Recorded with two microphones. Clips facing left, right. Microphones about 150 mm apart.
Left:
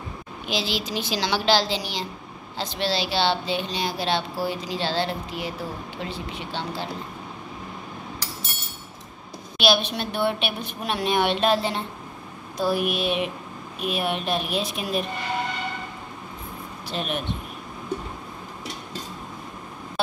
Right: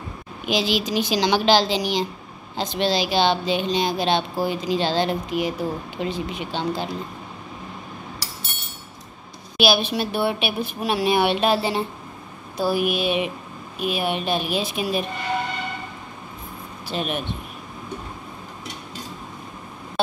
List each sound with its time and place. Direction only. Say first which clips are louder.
0.5 s a woman's voice: right 5 dB; 15° right (ahead or behind)
9.6 s a woman's voice: right 2 dB; 5° right (ahead or behind)
16.8 s speech: right 2 dB; 5° right (ahead or behind)